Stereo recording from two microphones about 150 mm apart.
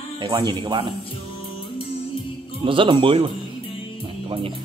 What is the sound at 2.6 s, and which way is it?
Speech, 35° right (ahead or behind).